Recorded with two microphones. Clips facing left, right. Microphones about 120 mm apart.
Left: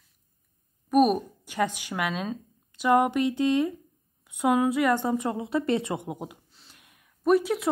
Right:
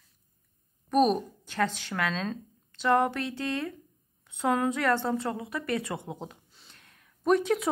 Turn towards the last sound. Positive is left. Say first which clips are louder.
# left 2 dB
turn(degrees=5)  # may be behind; listen again after turning